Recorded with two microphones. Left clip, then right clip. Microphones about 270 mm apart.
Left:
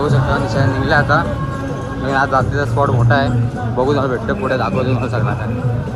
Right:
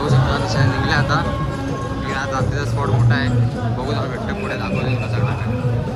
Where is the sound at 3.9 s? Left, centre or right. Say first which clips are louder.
Left 7 dB; centre.